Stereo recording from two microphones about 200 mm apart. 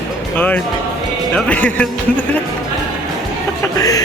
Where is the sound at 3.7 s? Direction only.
15° left (ahead or behind).